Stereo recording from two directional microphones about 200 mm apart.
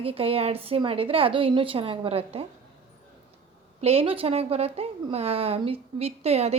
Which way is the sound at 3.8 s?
30° right (ahead or behind).